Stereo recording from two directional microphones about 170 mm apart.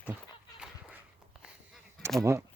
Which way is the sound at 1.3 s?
5° right (ahead or behind).